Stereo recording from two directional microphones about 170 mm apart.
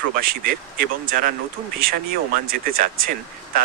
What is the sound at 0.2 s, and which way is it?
Speech, 60° right (ahead or behind).